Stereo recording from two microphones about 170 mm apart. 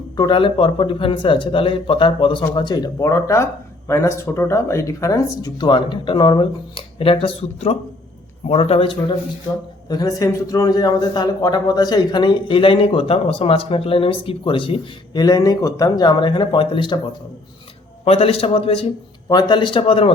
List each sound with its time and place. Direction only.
0.2 s speech: 30° left (ahead or behind)
9.9 s speech: 20° left (ahead or behind)